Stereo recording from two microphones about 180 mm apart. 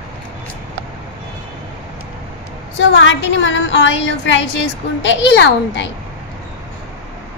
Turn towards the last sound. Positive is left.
turn(degrees=80)